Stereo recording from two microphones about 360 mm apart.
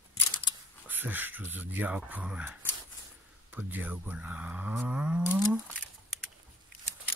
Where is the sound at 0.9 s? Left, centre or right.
Centre.